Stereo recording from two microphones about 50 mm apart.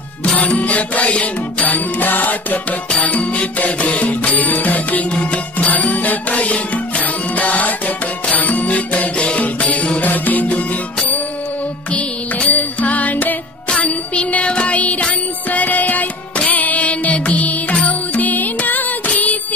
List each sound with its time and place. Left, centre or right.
0.2 s music: left
11.9 s music: left